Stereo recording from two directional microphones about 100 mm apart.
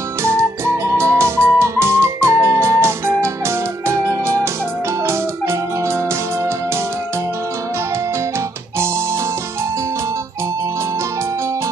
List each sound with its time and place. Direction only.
0.2 s music: 30° right (ahead or behind)